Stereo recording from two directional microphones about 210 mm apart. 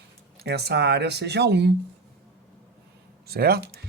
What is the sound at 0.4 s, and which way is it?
Speech, 50° right (ahead or behind).